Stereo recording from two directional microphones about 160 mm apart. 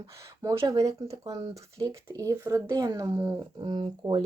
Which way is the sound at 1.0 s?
25° right (ahead or behind).